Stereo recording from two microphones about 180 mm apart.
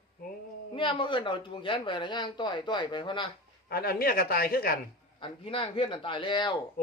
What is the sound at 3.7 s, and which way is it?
Speech, 60° left (ahead or behind).